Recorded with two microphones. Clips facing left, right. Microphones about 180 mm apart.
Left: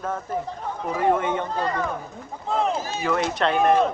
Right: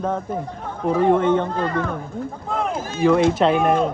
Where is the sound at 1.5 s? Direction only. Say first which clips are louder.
Right 3 dB; 50° right (ahead or behind).